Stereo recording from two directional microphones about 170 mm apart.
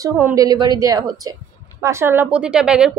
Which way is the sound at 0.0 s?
20° right (ahead or behind).